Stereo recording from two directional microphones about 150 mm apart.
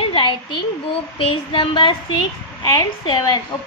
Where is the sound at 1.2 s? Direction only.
35° left (ahead or behind).